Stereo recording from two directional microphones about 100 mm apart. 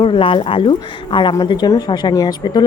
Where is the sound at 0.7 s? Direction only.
50° left (ahead or behind).